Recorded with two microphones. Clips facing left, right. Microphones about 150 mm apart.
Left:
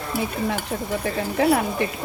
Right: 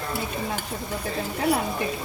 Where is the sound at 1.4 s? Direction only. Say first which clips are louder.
Left 5 dB; 90° left.